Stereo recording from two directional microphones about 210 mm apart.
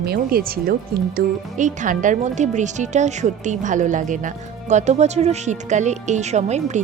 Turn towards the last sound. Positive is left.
turn(degrees=-35)  # may be behind; listen again after turning